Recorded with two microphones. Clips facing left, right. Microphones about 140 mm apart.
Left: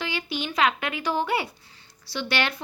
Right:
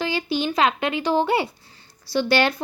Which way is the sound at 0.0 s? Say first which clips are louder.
Right 7 dB; 35° right (ahead or behind).